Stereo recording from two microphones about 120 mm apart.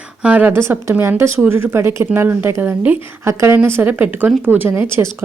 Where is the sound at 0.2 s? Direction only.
10° right (ahead or behind).